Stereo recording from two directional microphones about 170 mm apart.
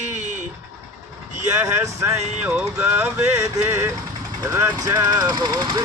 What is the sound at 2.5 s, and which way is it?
Speech, 10° right (ahead or behind).